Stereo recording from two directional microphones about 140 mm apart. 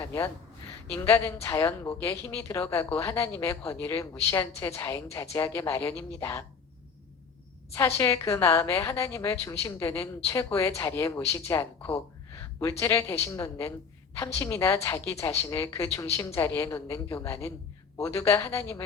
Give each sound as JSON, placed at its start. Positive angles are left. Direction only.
{"t": 0.9, "sound": "a woman's voice", "side_deg": 20}
{"t": 7.8, "sound": "a woman's voice", "side_deg": 20}